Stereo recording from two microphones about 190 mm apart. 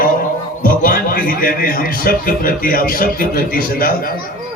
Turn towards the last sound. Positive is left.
turn(degrees=50)  # may be behind; listen again after turning